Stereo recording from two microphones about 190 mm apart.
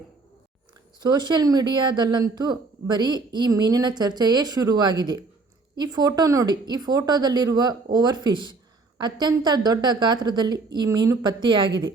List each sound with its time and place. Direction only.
0.9 s speech: 20° right (ahead or behind)